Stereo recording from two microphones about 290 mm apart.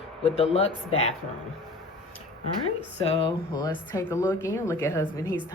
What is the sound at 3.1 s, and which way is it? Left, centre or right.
Speech, centre.